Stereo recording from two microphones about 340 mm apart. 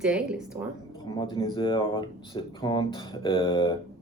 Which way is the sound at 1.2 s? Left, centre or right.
Centre.